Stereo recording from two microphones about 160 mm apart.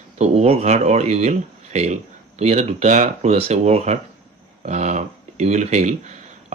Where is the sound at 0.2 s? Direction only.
40° right (ahead or behind).